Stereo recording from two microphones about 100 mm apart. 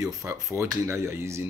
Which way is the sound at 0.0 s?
35° right (ahead or behind).